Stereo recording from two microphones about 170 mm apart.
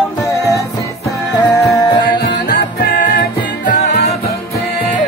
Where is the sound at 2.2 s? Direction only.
65° left (ahead or behind).